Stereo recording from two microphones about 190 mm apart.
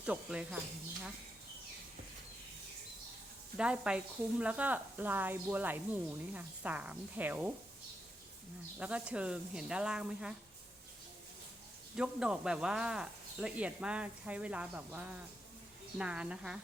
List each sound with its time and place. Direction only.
0.0 s speech: 5° right (ahead or behind)
3.6 s speech: 5° right (ahead or behind)
8.8 s speech: 5° right (ahead or behind)
11.9 s speech: 5° right (ahead or behind)